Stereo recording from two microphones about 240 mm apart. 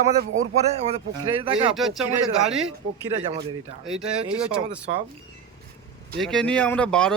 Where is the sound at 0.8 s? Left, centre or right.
Right.